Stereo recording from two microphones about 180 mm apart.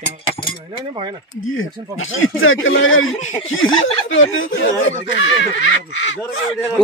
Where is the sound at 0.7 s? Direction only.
30° right (ahead or behind).